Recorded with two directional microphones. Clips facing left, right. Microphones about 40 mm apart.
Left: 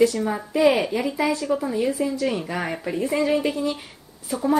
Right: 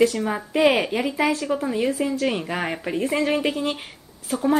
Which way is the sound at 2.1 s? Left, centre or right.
Right.